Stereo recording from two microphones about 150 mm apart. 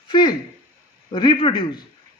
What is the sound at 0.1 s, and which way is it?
A man's voice, 30° left (ahead or behind).